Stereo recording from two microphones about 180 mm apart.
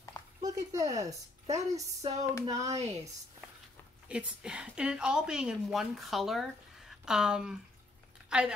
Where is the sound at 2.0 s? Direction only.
40° right (ahead or behind).